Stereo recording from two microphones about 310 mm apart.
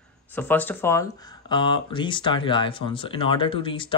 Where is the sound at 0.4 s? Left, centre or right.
Centre.